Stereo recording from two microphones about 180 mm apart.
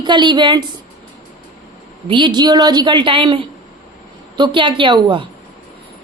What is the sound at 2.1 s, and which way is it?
Speech, 25° right (ahead or behind).